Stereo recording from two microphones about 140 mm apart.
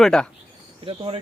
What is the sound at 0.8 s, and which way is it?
Speech, 40° right (ahead or behind).